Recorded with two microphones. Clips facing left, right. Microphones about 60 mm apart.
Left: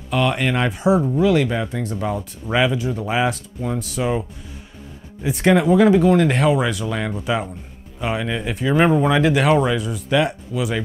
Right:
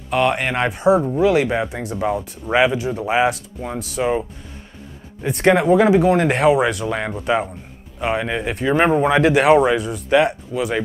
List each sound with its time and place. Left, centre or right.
0.1 s speech: centre
0.7 s speech: centre
1.4 s speech: right
1.7 s speech: centre
5.2 s speech: centre
6.9 s speech: right
7.2 s a man's voice: centre
8.2 s speech: centre
9.1 s a man's voice: centre